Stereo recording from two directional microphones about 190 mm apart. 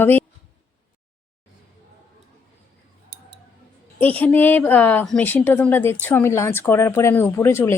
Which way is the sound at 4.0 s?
10° left (ahead or behind).